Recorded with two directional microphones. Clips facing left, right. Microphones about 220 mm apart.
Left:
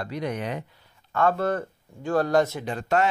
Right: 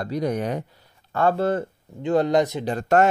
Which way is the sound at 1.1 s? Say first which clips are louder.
Right 2 dB; 30° right (ahead or behind).